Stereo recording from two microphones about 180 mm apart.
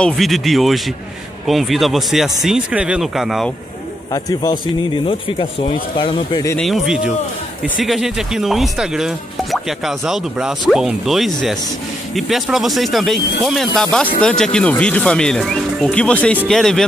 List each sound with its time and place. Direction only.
0.0 s speech: centre (ahead or behind)
4.1 s speech: 20° left (ahead or behind)
6.6 s speech: centre (ahead or behind)